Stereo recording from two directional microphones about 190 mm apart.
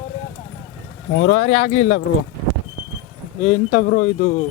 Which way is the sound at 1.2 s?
35° left (ahead or behind).